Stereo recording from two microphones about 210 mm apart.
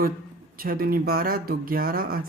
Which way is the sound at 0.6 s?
45° right (ahead or behind).